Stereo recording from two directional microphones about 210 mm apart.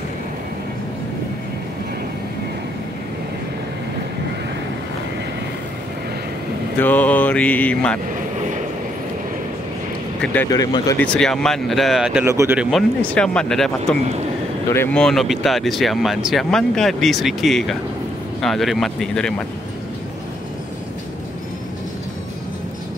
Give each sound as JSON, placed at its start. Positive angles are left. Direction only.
{"t": 6.8, "sound": "mantra", "side_deg": 10}
{"t": 10.2, "sound": "mantra", "side_deg": 5}
{"t": 11.1, "sound": "speech", "side_deg": 0}
{"t": 12.7, "sound": "speech", "side_deg": 5}